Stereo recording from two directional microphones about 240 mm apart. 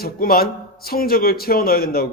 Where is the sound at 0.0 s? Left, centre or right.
Left.